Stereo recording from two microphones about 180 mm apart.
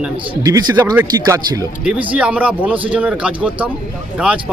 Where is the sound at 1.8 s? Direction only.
5° right (ahead or behind).